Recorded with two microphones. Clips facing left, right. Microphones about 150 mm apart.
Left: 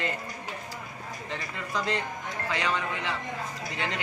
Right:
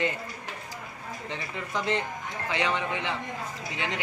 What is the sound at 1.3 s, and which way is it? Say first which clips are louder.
Speech: even; 20° right (ahead or behind).